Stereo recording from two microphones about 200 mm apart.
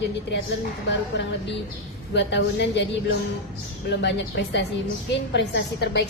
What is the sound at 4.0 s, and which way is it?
A woman's voice, 60° left (ahead or behind).